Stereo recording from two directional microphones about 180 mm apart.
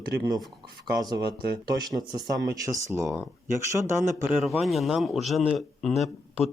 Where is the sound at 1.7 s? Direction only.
20° right (ahead or behind).